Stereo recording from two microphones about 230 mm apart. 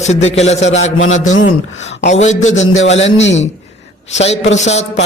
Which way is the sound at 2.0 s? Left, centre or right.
Left.